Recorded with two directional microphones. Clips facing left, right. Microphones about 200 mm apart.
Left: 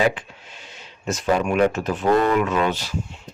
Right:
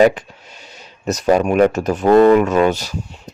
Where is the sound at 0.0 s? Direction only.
40° right (ahead or behind).